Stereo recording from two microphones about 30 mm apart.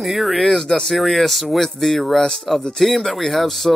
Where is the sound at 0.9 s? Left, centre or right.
Centre.